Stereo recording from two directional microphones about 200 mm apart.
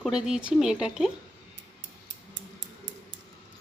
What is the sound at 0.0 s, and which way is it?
Speech, 5° right (ahead or behind).